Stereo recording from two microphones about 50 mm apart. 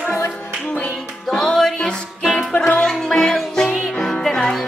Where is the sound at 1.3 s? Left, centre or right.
Centre.